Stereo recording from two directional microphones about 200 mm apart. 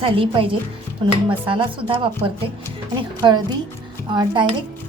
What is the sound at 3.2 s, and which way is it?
Speech, 20° right (ahead or behind).